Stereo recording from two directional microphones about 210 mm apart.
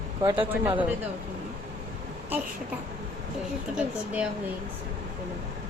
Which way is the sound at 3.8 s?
5° right (ahead or behind).